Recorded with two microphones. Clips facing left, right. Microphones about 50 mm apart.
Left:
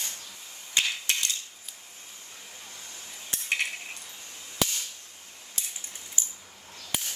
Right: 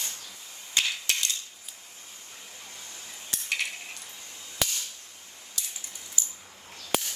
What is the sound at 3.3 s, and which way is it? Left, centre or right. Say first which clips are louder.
Cutlery: left 2 dB; left.